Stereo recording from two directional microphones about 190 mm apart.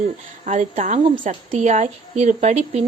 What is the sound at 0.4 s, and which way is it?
A woman's voice, 40° right (ahead or behind).